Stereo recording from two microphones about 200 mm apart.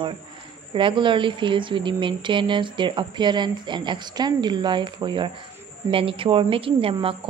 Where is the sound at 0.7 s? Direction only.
25° right (ahead or behind).